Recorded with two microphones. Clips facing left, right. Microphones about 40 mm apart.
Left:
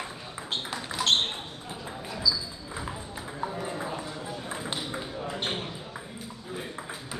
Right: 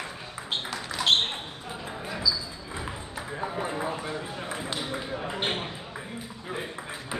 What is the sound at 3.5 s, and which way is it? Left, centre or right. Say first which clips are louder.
Clip-clop: right 3 dB; right.